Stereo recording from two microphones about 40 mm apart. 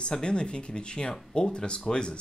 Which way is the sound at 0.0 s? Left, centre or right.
Left.